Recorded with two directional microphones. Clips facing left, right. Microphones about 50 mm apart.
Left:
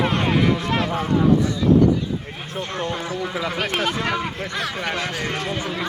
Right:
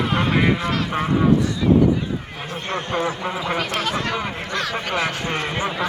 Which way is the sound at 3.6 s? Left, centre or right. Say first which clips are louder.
Even; left.